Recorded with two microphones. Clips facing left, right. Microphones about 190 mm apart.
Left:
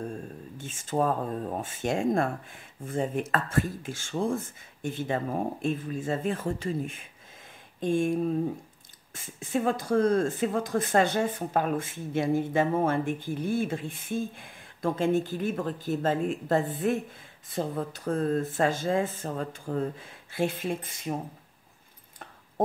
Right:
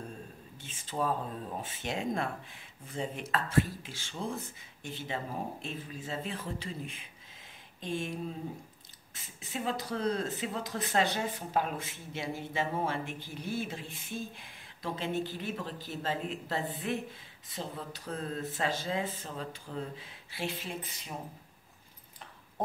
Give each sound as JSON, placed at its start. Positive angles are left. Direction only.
{"t": 0.6, "sound": "speech", "side_deg": 45}